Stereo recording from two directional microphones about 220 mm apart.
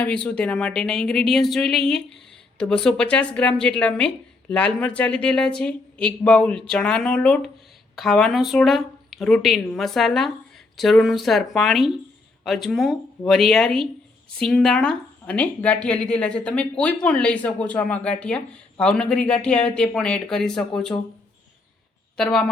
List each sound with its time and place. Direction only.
0.0 s speech: 5° left (ahead or behind)
22.2 s speech: centre (ahead or behind)